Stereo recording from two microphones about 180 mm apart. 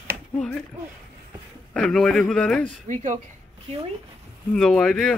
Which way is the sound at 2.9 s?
45° right (ahead or behind).